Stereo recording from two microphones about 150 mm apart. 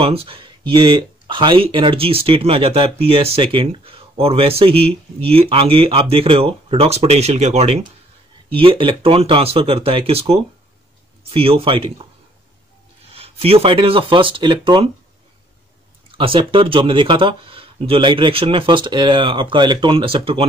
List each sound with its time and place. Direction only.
0.0 s speech: 40° right (ahead or behind)
13.1 s speech: 40° right (ahead or behind)
16.1 s speech: 35° right (ahead or behind)